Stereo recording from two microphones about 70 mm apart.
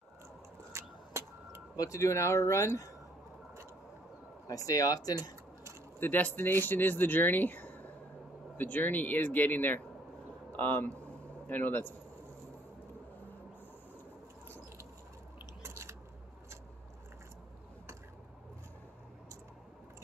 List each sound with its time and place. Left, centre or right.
0.7 s vehicle: right
1.8 s speech: left
4.5 s speech: left
5.9 s speech: left
15.6 s biting: right